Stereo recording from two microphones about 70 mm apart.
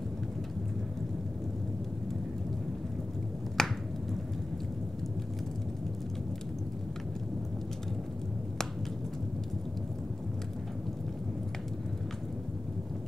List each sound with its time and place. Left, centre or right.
3.6 s finger snapping: centre